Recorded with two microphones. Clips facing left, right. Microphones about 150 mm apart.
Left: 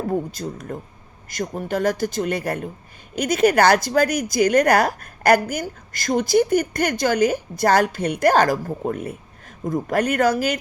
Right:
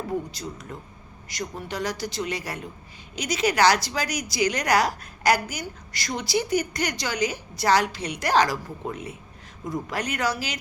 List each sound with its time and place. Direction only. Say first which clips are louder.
0.1 s a woman's voice: left 5 dB; 50° left (ahead or behind)